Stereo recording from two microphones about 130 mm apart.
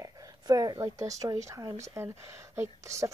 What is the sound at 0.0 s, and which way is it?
A woman's voice, 25° right (ahead or behind).